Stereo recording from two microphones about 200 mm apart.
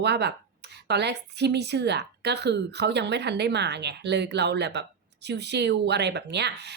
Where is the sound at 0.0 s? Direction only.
55° right (ahead or behind).